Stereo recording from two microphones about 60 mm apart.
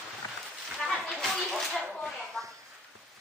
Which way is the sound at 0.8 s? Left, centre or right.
Centre.